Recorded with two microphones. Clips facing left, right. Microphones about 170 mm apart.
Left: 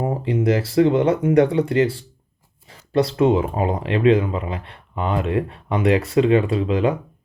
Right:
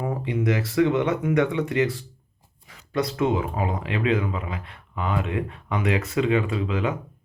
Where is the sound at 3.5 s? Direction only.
35° left (ahead or behind).